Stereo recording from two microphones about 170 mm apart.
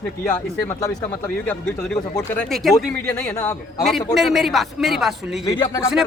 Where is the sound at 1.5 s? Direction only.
10° left (ahead or behind).